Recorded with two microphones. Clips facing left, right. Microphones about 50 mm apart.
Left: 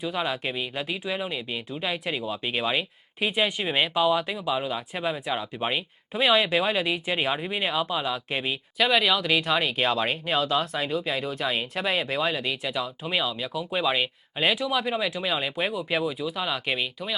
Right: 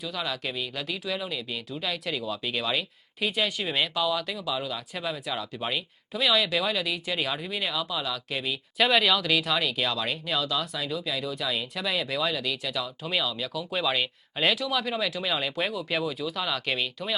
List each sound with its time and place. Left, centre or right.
0.0 s speech: left
8.8 s speech: centre